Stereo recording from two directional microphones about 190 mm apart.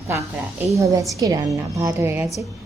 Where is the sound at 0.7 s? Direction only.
15° right (ahead or behind).